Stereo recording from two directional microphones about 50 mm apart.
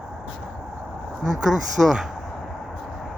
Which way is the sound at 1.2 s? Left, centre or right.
Centre.